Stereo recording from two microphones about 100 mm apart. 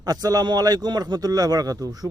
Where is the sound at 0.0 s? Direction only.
40° right (ahead or behind).